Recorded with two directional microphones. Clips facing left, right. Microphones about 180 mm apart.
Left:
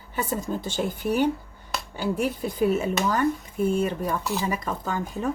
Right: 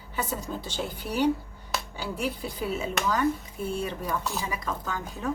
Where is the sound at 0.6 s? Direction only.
50° left (ahead or behind).